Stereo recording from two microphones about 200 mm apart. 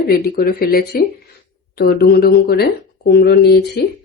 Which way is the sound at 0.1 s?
50° left (ahead or behind).